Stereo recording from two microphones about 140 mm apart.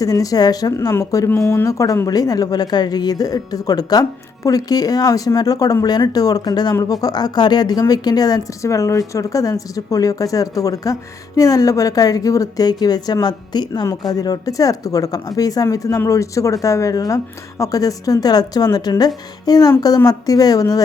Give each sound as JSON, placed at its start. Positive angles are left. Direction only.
{"t": 0.0, "sound": "a woman's voice", "side_deg": 25}